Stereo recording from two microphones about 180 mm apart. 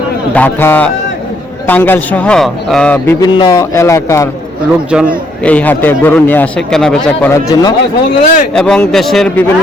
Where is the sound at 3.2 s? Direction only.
25° left (ahead or behind).